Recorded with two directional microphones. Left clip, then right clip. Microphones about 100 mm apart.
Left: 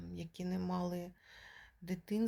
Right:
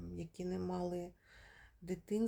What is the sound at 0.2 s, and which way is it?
Speech, 40° right (ahead or behind).